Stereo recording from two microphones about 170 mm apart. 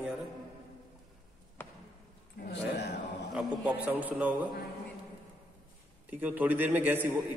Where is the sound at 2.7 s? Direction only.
80° left.